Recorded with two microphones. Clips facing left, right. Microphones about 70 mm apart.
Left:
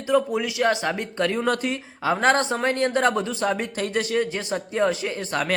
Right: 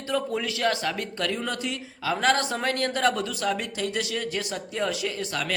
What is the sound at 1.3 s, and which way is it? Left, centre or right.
Speech, left.